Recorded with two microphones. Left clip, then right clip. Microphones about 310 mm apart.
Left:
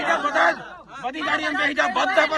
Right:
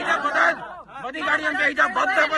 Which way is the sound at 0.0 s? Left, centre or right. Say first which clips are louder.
Even; centre.